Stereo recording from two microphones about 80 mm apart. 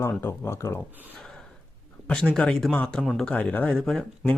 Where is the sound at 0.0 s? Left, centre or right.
Left.